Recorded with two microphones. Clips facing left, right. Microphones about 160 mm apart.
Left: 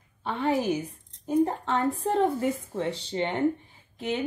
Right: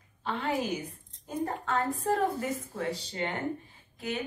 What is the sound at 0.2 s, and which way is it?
A woman's voice, 25° left (ahead or behind).